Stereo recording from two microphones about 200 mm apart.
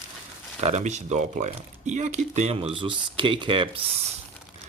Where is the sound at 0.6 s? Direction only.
35° right (ahead or behind).